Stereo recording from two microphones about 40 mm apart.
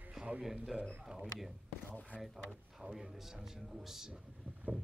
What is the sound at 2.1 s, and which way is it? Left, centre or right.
Speech, left.